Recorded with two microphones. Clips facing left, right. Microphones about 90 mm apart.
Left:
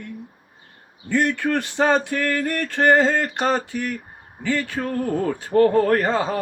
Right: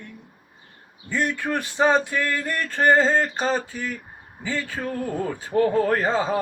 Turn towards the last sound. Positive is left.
turn(degrees=70)  # may be behind; listen again after turning